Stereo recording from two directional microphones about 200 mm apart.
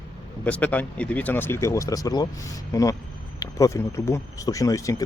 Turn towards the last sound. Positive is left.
turn(degrees=15)  # may be behind; listen again after turning